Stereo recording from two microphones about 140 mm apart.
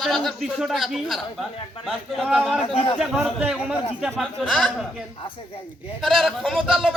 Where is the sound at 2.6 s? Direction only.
40° left (ahead or behind).